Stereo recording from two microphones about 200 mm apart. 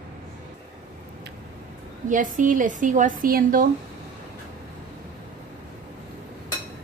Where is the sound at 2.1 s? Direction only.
40° right (ahead or behind).